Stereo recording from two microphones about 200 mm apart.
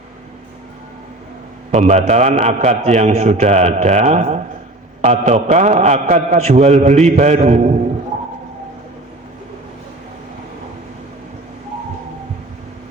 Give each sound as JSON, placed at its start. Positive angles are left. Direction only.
{"t": 1.7, "sound": "a man's voice", "side_deg": -35}